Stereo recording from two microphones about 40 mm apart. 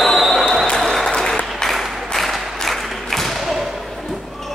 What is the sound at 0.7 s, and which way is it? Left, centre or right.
Applause, centre.